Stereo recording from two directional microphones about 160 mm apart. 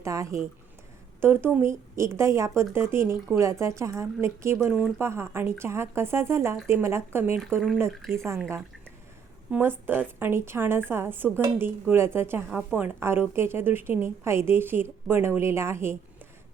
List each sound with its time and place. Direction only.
0.0 s speech: 20° right (ahead or behind)
9.5 s speech: 15° right (ahead or behind)